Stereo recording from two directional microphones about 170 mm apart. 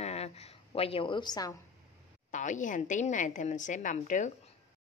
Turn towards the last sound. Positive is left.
turn(degrees=45)  # may be behind; listen again after turning